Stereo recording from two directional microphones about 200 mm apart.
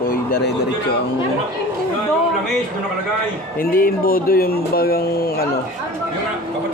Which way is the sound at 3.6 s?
45° left (ahead or behind).